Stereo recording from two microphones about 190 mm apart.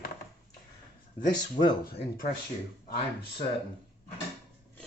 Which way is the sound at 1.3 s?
25° left (ahead or behind).